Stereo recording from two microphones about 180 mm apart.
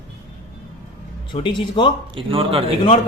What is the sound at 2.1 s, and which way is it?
Speech, 30° right (ahead or behind).